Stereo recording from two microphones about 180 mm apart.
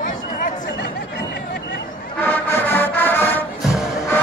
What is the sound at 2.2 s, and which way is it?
Music, 10° left (ahead or behind).